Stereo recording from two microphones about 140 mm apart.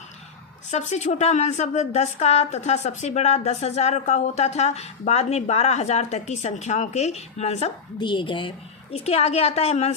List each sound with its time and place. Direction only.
0.7 s speech: 55° left (ahead or behind)
7.9 s speech: 35° left (ahead or behind); by 9.9 s 50° left (ahead or behind)